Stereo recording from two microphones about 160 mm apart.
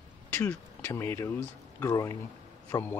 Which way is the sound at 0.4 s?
10° left (ahead or behind).